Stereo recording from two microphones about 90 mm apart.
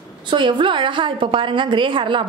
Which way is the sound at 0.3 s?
60° right (ahead or behind).